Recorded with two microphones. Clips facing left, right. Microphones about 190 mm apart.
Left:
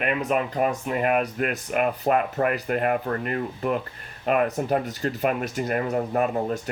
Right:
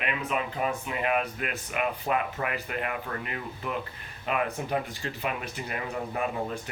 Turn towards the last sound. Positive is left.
turn(degrees=45)  # may be behind; listen again after turning